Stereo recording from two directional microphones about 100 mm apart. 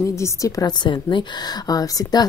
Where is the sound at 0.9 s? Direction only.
45° left (ahead or behind).